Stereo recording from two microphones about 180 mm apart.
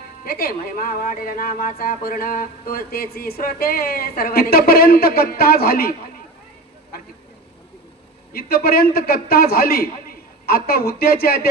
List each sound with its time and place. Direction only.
0.3 s speech: 60° left (ahead or behind)
6.9 s vehicle: 55° left (ahead or behind)
8.3 s speech: 55° left (ahead or behind)